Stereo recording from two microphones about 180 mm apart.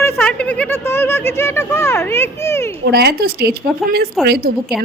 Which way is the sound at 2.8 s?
65° right (ahead or behind).